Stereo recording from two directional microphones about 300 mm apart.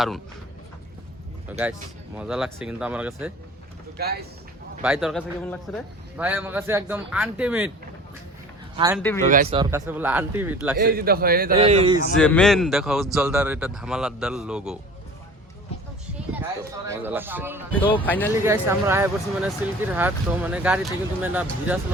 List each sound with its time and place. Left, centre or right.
2.1 s speech: centre
3.9 s speech: right
4.8 s speech: centre
8.7 s speech: centre
9.0 s speech: centre
9.2 s a man's voice: right
9.6 s speech: centre
10.8 s a man's voice: right
12.1 s speech: centre
16.4 s speech: centre
17.7 s speech: centre
18.4 s speech: centre